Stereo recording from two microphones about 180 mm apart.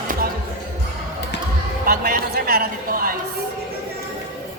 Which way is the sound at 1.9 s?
55° right (ahead or behind).